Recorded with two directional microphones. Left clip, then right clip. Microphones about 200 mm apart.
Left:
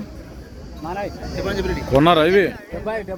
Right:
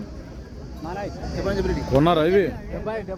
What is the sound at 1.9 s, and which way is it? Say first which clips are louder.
Speech: left 4 dB; centre (ahead or behind).